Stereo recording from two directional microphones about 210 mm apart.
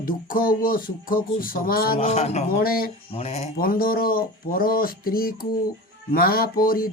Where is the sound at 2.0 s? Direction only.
30° left (ahead or behind).